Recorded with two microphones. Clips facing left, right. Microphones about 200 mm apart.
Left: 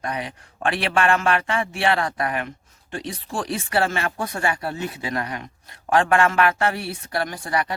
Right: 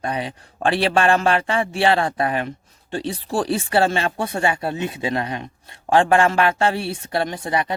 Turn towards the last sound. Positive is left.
turn(degrees=-20)  # may be behind; listen again after turning